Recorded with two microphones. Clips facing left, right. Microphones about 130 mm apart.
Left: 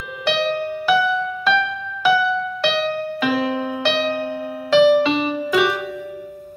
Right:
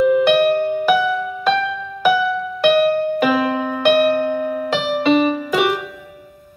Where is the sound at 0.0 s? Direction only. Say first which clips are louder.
Right 9 dB; 50° right (ahead or behind).